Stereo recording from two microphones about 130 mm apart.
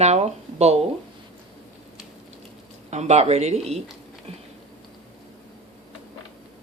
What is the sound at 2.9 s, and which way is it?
Speech, 60° right (ahead or behind).